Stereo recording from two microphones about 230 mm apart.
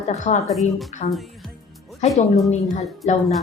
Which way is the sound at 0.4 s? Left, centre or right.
Centre.